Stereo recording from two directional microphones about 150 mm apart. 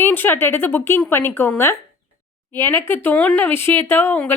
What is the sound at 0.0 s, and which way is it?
A woman's voice, 15° left (ahead or behind).